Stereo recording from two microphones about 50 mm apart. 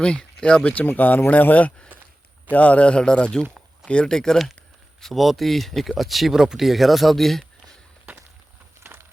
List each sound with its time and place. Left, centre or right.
0.0 s a man's voice: centre
4.9 s speech: centre
8.8 s horse: right